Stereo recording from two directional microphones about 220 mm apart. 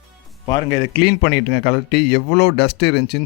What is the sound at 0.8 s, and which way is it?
A man's voice, 50° left (ahead or behind).